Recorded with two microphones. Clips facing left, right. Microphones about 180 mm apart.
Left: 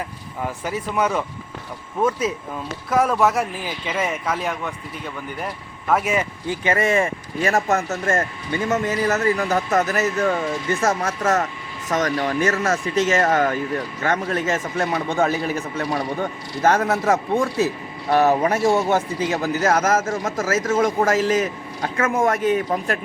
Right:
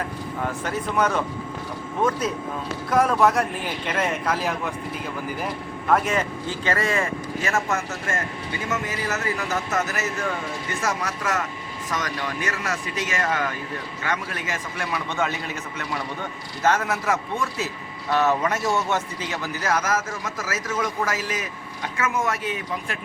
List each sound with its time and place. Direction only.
0.4 s a man's voice: 5° left (ahead or behind)
7.4 s a man's voice: 35° left (ahead or behind)
13.0 s a man's voice: 25° left (ahead or behind)
13.2 s speech: 45° left (ahead or behind)
14.2 s a man's voice: 25° left (ahead or behind)
14.8 s a man's voice: 40° left (ahead or behind)
20.1 s speech: 50° left (ahead or behind)
20.3 s a man's voice: 25° left (ahead or behind)
21.8 s speech: 45° left (ahead or behind)